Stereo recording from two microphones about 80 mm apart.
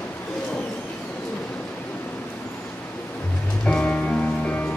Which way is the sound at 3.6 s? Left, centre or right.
Centre.